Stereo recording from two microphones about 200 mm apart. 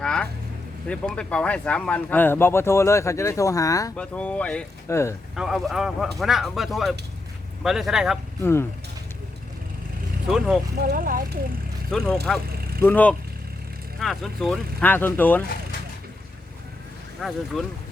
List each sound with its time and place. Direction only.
0.0 s vehicle: 5° left (ahead or behind)
0.9 s speech: 5° left (ahead or behind)
3.9 s speech: 5° left (ahead or behind)
5.3 s a man's voice: centre (ahead or behind)
8.4 s speech: 10° left (ahead or behind)
10.2 s a man's voice: centre (ahead or behind)
10.8 s speech: 50° right (ahead or behind)
11.9 s speech: 5° left (ahead or behind)
17.2 s a man's voice: centre (ahead or behind)